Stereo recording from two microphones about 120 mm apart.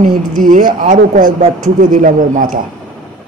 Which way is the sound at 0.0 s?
90° right.